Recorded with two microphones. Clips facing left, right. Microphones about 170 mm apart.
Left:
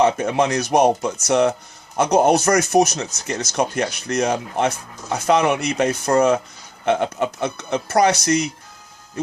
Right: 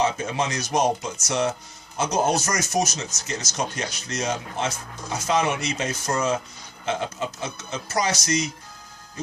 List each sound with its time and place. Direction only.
0.0 s speech: 60° left (ahead or behind)